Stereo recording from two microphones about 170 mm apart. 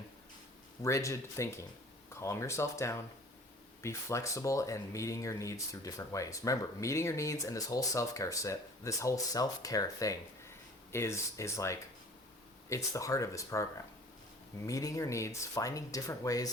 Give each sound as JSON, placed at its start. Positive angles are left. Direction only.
{"t": 0.8, "sound": "speech", "side_deg": 20}
{"t": 14.7, "sound": "speech", "side_deg": 20}